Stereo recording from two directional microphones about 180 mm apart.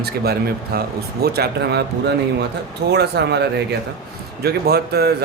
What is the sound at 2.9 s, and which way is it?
Speech, 65° right (ahead or behind).